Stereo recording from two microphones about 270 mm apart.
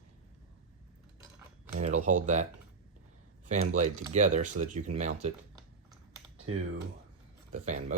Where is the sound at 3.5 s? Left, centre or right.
Right.